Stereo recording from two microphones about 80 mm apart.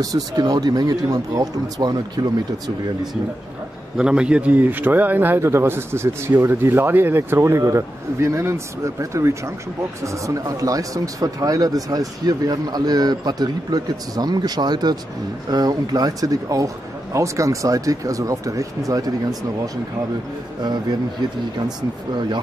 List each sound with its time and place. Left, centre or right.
0.0 s speech: right
4.0 s speech: centre; by 19.1 s right
21.6 s speech: right